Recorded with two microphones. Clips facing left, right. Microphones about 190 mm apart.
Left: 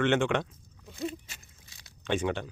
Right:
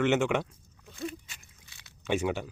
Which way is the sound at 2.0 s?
10° right (ahead or behind).